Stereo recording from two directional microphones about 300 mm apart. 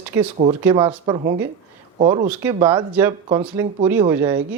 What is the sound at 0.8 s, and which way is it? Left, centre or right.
Speech, centre.